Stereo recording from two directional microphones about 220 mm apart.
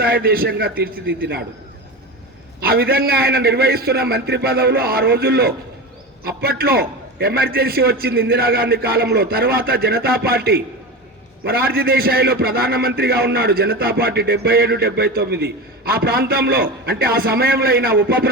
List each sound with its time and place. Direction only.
0.0 s a man's voice: 45° right (ahead or behind)
2.6 s a man's voice: 45° right (ahead or behind)
11.7 s a man's voice: 45° right (ahead or behind)